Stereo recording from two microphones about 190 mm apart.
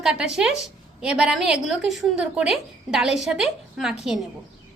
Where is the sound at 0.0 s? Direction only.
5° right (ahead or behind).